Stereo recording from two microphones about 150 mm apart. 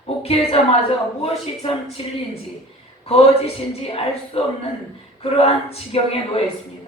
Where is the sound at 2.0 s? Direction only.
40° left (ahead or behind).